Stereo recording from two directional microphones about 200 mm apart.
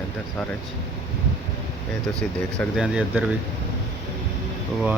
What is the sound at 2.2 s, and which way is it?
Speech, 5° left (ahead or behind).